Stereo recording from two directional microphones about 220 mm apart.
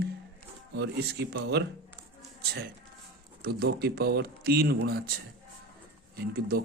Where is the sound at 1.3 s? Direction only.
50° right (ahead or behind).